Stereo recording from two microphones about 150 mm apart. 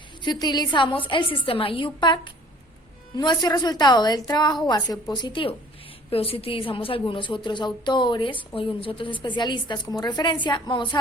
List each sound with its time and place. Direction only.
0.2 s a woman's voice: 30° left (ahead or behind)